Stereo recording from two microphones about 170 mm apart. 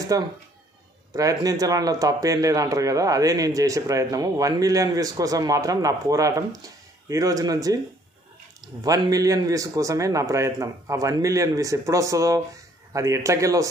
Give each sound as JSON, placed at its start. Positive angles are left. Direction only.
{"t": 0.1, "sound": "speech", "side_deg": -20}
{"t": 8.8, "sound": "speech", "side_deg": -20}